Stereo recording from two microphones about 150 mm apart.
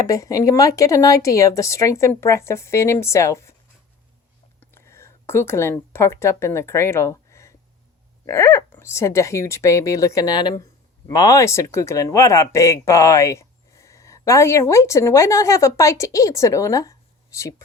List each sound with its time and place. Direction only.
0.1 s speech: 20° left (ahead or behind)
4.6 s speech: 15° left (ahead or behind)